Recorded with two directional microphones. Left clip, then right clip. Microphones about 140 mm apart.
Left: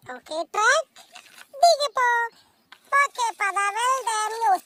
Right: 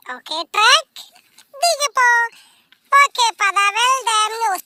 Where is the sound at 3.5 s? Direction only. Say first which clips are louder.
Right 7 dB; 30° right (ahead or behind).